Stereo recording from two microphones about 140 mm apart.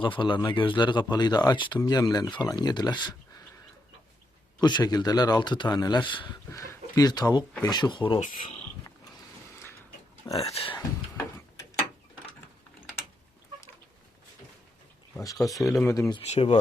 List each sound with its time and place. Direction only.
0.0 s speech: 35° left (ahead or behind)
4.6 s speech: 30° left (ahead or behind)
6.5 s speech: 20° left (ahead or behind)
10.3 s speech: 45° left (ahead or behind)
15.4 s speech: centre (ahead or behind)
16.0 s speech: 30° left (ahead or behind)
16.2 s speech: 50° left (ahead or behind)